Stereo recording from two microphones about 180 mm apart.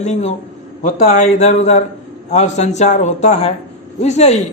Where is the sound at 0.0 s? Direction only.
40° left (ahead or behind).